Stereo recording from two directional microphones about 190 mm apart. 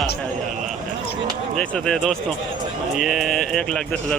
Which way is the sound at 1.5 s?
5° left (ahead or behind).